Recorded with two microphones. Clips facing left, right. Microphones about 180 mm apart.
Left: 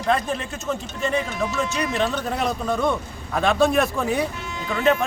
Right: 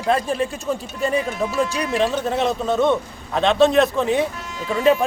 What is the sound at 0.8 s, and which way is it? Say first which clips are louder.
Speech: right 3 dB; 35° right (ahead or behind).